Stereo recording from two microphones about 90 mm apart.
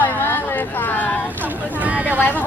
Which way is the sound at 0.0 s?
25° left (ahead or behind).